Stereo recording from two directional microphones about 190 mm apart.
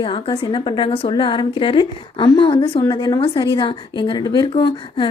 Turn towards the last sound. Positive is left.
turn(degrees=25)  # may be behind; listen again after turning